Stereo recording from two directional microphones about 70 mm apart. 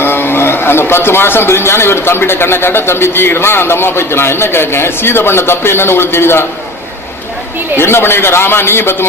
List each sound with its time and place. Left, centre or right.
0.0 s a man's voice: left
7.8 s a man's voice: left